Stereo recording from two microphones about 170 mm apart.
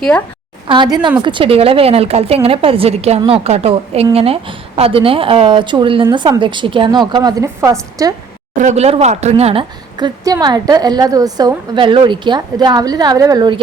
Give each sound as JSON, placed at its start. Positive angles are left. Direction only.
{"t": 0.7, "sound": "a woman's voice", "side_deg": -25}
{"t": 8.5, "sound": "a woman's voice", "side_deg": -45}
{"t": 10.2, "sound": "a woman's voice", "side_deg": -20}